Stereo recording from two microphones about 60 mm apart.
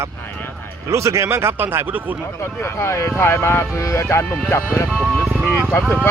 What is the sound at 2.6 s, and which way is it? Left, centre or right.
Speech, left.